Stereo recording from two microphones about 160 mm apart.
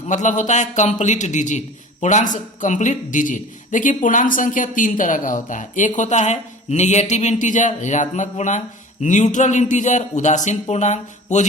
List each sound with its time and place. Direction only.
0.1 s a man's voice: 50° left (ahead or behind)